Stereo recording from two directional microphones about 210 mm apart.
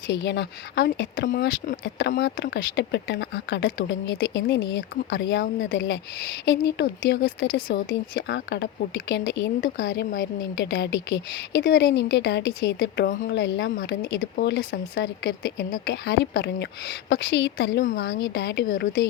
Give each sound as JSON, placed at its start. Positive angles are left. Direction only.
{"t": 0.1, "sound": "speech", "side_deg": 55}
{"t": 7.9, "sound": "speech", "side_deg": 60}
{"t": 17.8, "sound": "speech", "side_deg": 45}